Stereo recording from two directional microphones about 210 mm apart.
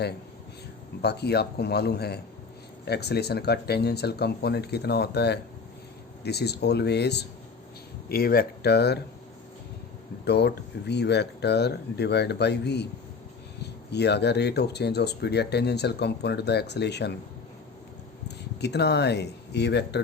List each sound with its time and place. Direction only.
1.0 s speech: 50° left (ahead or behind)
10.2 s speech: 50° left (ahead or behind)
18.6 s speech: 55° left (ahead or behind)